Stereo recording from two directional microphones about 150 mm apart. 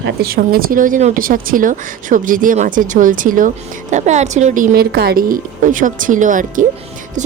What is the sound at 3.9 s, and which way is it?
Speech, 50° right (ahead or behind).